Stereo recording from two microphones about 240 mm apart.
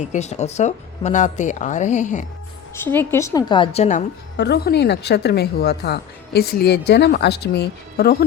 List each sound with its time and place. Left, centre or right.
0.0 s speech: left
2.7 s a woman's voice: centre; by 4.0 s left
4.4 s a woman's voice: left